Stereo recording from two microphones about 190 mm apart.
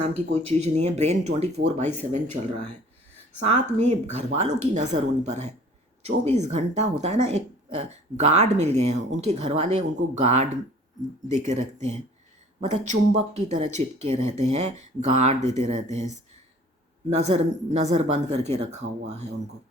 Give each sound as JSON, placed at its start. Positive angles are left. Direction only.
{"t": 0.4, "sound": "speech", "side_deg": -35}
{"t": 17.2, "sound": "speech", "side_deg": -35}